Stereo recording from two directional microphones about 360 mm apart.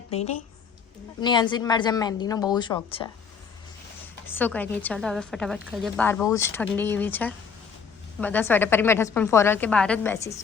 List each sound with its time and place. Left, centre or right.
0.1 s a woman's voice: centre
4.3 s a woman's voice: centre